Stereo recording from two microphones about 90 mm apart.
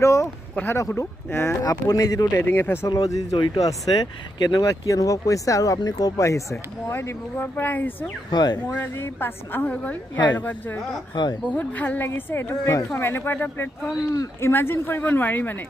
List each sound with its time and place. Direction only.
0.0 s a woman's voice: 35° left (ahead or behind)
1.6 s speech: 40° left (ahead or behind)
2.4 s a woman's voice: 20° left (ahead or behind)
2.9 s speech: 40° left (ahead or behind)
3.3 s speech: 60° left (ahead or behind)
3.6 s speech: 50° left (ahead or behind)
4.6 s a woman's voice: 35° left (ahead or behind); by 7.9 s 20° left (ahead or behind)
8.3 s speech: 50° left (ahead or behind)
8.7 s a woman's voice: 25° left (ahead or behind)
11.1 s speech: 55° left (ahead or behind)
11.5 s a woman's voice: 20° left (ahead or behind)